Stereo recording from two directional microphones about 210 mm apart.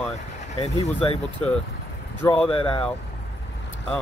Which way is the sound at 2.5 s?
25° left (ahead or behind).